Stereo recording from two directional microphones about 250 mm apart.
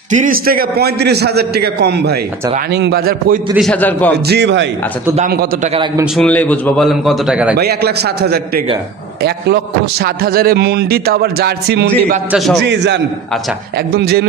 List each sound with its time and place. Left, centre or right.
0.1 s a man's voice: right
3.5 s a man's voice: centre
4.3 s a man's voice: right
5.1 s a man's voice: right
6.1 s a man's voice: centre
7.5 s a man's voice: right
10.0 s a man's voice: right
12.3 s a man's voice: centre
12.6 s a man's voice: right